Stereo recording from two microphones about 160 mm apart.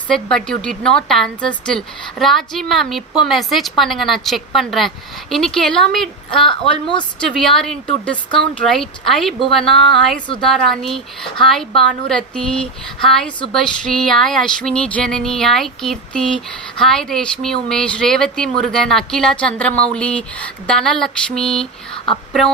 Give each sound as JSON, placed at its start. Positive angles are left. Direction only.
{"t": 0.1, "sound": "speech", "side_deg": 5}
{"t": 6.5, "sound": "a woman's voice", "side_deg": 30}
{"t": 7.2, "sound": "speech", "side_deg": 5}
{"t": 21.9, "sound": "a sound", "side_deg": 35}